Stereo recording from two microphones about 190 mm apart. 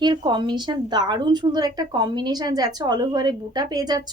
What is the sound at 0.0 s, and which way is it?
Speech, 25° right (ahead or behind).